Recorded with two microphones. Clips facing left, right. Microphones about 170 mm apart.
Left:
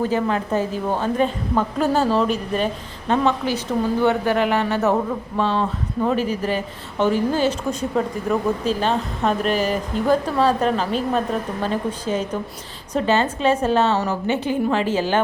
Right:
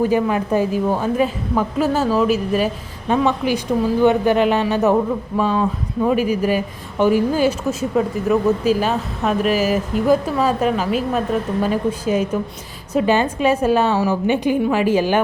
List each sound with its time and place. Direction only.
0.0 s speech: 15° right (ahead or behind)